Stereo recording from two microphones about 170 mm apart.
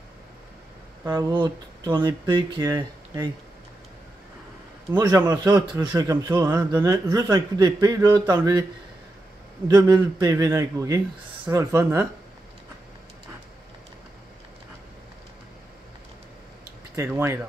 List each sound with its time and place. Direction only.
1.0 s a man's voice: 25° right (ahead or behind)
4.9 s a man's voice: 25° right (ahead or behind)
9.7 s a man's voice: 25° right (ahead or behind)
16.9 s speech: 15° right (ahead or behind)